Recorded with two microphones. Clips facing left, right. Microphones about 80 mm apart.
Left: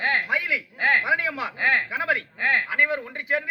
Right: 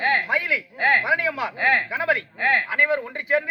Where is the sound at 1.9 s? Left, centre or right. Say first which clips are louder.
Right 2 dB; centre.